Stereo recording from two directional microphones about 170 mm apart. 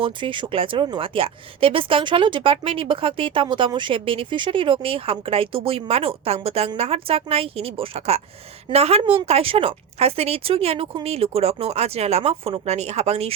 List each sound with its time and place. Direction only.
0.0 s speech: 30° right (ahead or behind)